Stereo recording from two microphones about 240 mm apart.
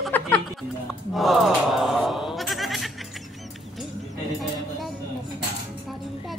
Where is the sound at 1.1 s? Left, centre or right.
Centre.